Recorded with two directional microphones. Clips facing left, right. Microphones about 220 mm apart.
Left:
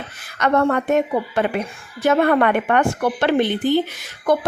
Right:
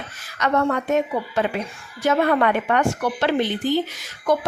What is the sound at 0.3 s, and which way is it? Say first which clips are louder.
A woman's voice: left 3 dB; 55° left (ahead or behind).